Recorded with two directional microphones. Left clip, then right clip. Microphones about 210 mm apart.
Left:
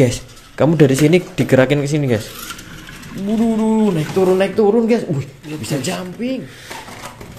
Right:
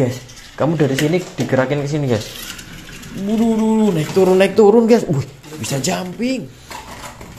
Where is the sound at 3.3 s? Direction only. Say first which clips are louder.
Even; centre (ahead or behind).